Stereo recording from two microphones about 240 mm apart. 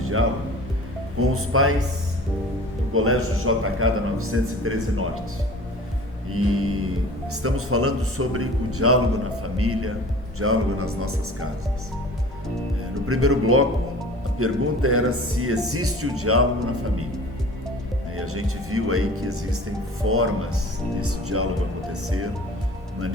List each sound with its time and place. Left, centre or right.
0.0 s music: right
1.2 s a man's voice: right
2.9 s a man's voice: right
6.3 s a man's voice: right
13.1 s a man's voice: right
18.2 s a man's voice: right